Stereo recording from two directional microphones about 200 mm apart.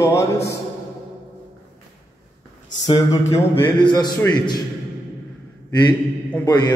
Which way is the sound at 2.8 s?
20° left (ahead or behind).